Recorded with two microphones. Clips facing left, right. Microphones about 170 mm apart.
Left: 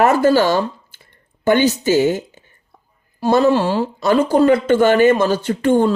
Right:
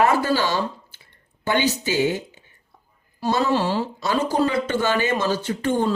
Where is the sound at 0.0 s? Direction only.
45° left (ahead or behind).